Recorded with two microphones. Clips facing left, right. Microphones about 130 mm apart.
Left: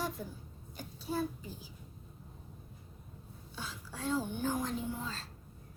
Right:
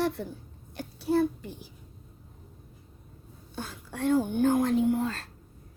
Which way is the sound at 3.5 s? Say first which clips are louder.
Right 6 dB; 55° right (ahead or behind).